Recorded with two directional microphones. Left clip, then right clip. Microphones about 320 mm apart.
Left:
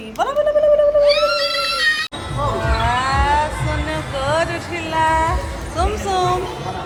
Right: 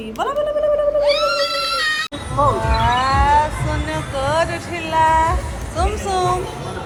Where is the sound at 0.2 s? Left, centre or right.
Centre.